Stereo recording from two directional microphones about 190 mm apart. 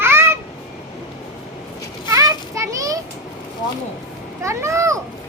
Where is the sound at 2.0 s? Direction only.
15° right (ahead or behind).